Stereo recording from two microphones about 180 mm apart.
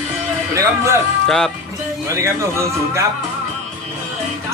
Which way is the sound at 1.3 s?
5° left (ahead or behind).